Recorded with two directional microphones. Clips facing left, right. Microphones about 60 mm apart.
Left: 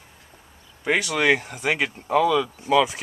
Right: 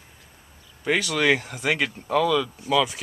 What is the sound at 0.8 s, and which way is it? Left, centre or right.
Speech, centre.